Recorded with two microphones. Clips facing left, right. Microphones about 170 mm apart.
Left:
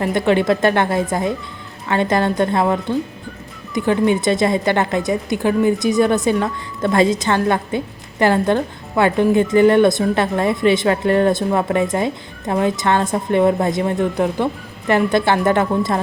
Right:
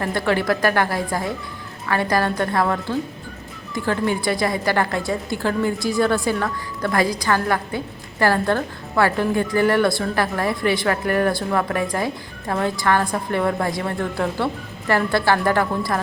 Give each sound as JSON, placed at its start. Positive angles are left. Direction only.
{"t": 0.0, "sound": "a woman's voice", "side_deg": 20}